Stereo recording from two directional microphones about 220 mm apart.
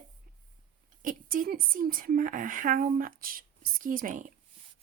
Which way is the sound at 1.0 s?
40° right (ahead or behind).